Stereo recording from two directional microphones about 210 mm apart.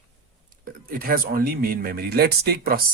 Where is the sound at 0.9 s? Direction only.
45° right (ahead or behind).